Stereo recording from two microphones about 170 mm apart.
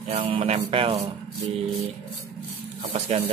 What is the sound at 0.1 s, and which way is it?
Speech, 35° right (ahead or behind).